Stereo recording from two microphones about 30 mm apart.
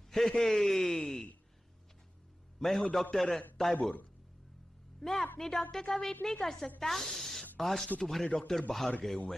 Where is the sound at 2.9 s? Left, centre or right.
Centre.